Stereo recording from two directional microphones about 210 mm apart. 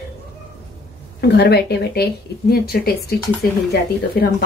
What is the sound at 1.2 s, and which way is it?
Speech, 50° left (ahead or behind).